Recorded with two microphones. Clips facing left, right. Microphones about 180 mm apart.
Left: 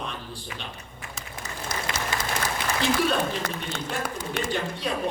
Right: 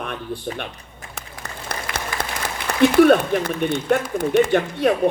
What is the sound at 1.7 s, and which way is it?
Applause, 60° right (ahead or behind).